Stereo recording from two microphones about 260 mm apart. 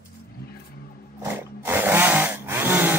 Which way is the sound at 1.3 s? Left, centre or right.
Centre.